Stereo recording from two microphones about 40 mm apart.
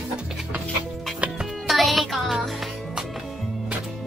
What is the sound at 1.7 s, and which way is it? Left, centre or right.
Music, centre.